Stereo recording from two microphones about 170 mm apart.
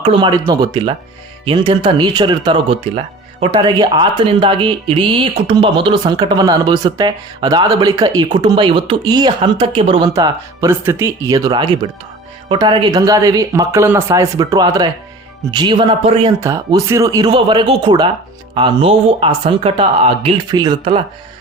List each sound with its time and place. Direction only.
0.0 s speech: 30° right (ahead or behind)
10.1 s speech: 20° right (ahead or behind)
16.4 s speech: 20° right (ahead or behind)